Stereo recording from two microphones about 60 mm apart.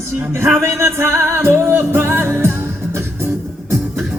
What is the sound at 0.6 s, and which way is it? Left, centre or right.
Music, right.